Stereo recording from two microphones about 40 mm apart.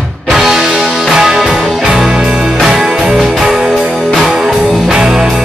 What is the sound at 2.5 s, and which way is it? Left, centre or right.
Music, centre.